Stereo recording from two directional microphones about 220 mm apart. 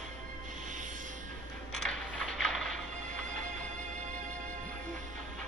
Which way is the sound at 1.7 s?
5° left (ahead or behind).